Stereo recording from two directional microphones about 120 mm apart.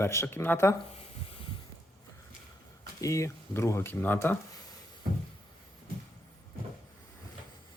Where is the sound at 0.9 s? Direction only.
50° left (ahead or behind).